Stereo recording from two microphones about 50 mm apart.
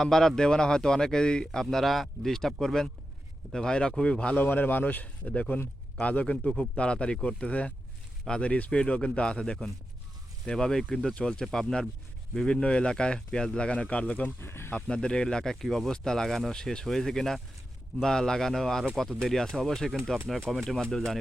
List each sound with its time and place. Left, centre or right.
0.0 s speech: centre
4.4 s speech: left; by 12.6 s centre
12.6 s speech: centre
14.3 s speech: left
14.8 s speech: centre